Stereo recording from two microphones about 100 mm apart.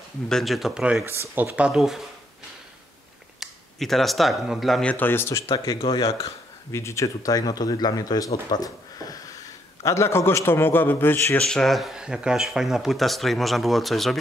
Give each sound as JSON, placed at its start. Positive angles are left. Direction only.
{"t": 0.3, "sound": "speech", "side_deg": 0}
{"t": 1.0, "sound": "speech", "side_deg": -25}
{"t": 1.7, "sound": "speech", "side_deg": -5}
{"t": 3.3, "sound": "speech", "side_deg": 0}
{"t": 4.8, "sound": "a man's voice", "side_deg": 20}
{"t": 9.8, "sound": "a man's voice", "side_deg": 25}
{"t": 11.3, "sound": "speech", "side_deg": 5}